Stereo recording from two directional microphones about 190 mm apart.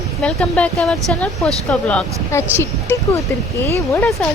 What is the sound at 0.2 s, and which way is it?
Speech, 5° left (ahead or behind).